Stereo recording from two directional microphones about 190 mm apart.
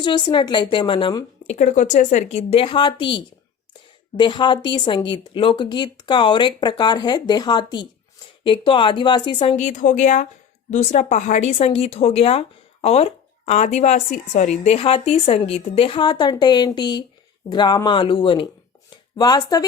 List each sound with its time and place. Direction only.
0.0 s speech: 25° left (ahead or behind)
1.5 s a woman's voice: 40° left (ahead or behind); by 19.6 s 20° left (ahead or behind)